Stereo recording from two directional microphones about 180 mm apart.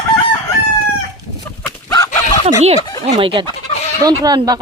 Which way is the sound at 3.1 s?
25° right (ahead or behind).